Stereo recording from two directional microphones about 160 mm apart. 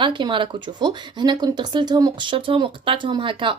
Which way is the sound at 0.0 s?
30° right (ahead or behind).